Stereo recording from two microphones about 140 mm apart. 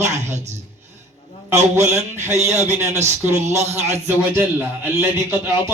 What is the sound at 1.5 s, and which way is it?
Speech, 20° right (ahead or behind).